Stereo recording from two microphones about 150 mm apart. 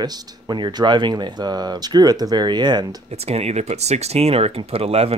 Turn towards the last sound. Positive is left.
turn(degrees=-40)  # may be behind; listen again after turning